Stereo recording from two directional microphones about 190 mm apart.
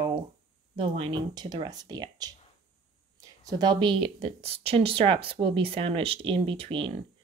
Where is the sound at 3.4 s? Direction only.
20° right (ahead or behind).